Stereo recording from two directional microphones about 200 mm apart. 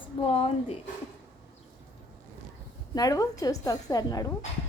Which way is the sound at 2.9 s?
20° left (ahead or behind).